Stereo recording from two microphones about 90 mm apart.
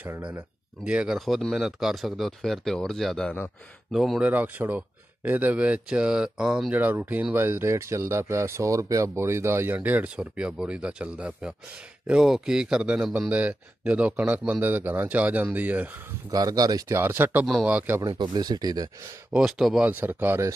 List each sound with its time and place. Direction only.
0.0 s speech: 20° right (ahead or behind)
0.8 s speech: 10° right (ahead or behind)
4.2 s speech: 20° right (ahead or behind)
6.8 s speech: 20° right (ahead or behind)
16.3 s speech: 45° right (ahead or behind)
16.9 s speech: 25° right (ahead or behind)
18.2 s speech: 50° right (ahead or behind)
19.3 s speech: 5° right (ahead or behind)
19.8 s speech: 20° right (ahead or behind)